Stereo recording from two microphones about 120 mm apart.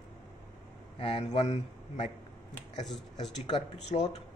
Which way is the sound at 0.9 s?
50° left (ahead or behind).